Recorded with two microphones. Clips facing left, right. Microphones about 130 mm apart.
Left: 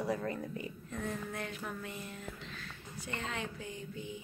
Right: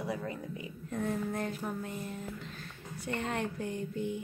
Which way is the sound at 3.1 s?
55° right (ahead or behind).